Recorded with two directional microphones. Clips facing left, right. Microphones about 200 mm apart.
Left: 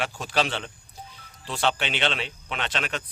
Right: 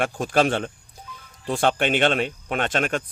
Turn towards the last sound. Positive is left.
turn(degrees=-50)  # may be behind; listen again after turning